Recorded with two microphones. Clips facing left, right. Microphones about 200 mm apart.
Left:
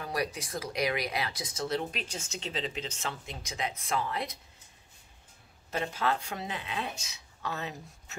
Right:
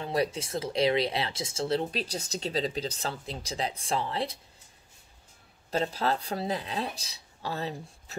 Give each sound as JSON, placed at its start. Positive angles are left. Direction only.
{"t": 0.0, "sound": "speech", "side_deg": -25}
{"t": 5.7, "sound": "speech", "side_deg": -35}